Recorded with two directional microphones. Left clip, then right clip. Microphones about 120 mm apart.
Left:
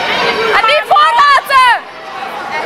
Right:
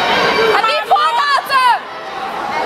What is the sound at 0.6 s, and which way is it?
Chatter, 20° left (ahead or behind).